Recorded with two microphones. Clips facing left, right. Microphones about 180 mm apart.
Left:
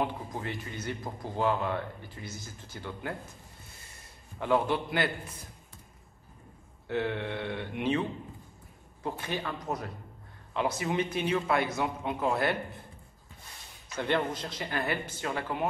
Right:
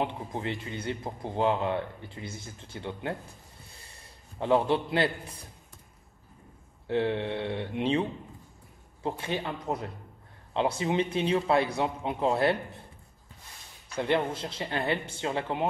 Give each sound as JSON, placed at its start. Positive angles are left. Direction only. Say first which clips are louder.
{"t": 0.0, "sound": "speech", "louder": "right 1 dB", "side_deg": -25}
{"t": 4.4, "sound": "speech", "louder": "right 3 dB", "side_deg": -25}
{"t": 6.9, "sound": "speech", "louder": "right 4 dB", "side_deg": -25}
{"t": 13.9, "sound": "speech", "louder": "right 2 dB", "side_deg": -25}